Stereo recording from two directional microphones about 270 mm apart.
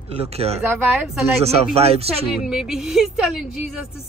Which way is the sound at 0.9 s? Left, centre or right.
Centre.